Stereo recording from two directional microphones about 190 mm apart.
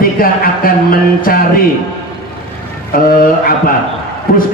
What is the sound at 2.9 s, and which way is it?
A man's voice, 50° left (ahead or behind).